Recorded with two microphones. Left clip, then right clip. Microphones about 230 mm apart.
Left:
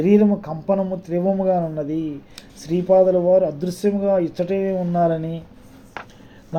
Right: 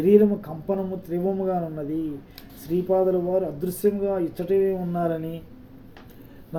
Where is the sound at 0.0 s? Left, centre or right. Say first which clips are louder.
Left 1 dB; left.